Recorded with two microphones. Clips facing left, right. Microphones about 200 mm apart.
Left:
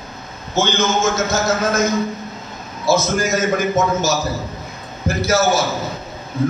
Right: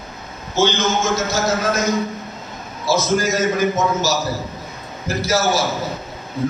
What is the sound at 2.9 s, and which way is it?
Speech, 50° left (ahead or behind).